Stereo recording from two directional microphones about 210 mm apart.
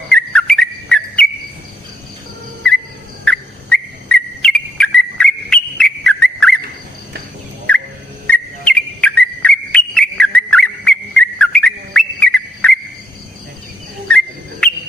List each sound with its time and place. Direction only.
0.1 s bird: 5° left (ahead or behind)
3.2 s whistle: 5° left (ahead or behind)
7.7 s a sound: 5° left (ahead or behind)
8.3 s whistle: 5° left (ahead or behind)